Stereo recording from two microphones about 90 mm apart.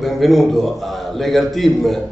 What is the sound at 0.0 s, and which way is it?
A man's voice, centre (ahead or behind).